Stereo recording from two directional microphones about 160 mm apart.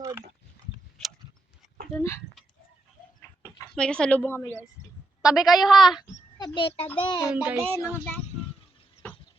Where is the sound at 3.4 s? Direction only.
5° left (ahead or behind).